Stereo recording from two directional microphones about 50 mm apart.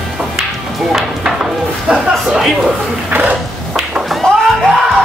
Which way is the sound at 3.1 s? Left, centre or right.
Right.